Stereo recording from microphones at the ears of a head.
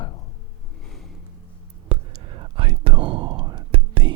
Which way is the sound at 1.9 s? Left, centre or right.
Right.